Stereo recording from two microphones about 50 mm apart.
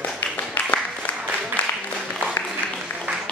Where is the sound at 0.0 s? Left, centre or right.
Left.